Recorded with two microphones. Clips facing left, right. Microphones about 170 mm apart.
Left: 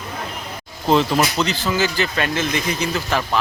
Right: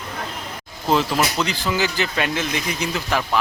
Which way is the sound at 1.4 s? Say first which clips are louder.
Left 2 dB; 15° right (ahead or behind).